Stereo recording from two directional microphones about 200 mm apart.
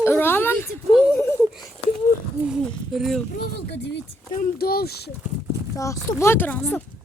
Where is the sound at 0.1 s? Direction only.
10° left (ahead or behind).